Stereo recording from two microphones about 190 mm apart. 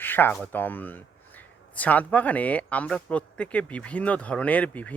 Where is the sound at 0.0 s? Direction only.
10° left (ahead or behind).